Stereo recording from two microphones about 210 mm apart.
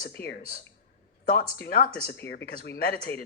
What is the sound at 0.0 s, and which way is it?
A woman's voice, 50° left (ahead or behind).